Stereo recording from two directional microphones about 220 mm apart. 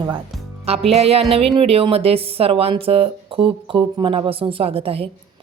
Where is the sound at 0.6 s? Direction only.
25° right (ahead or behind).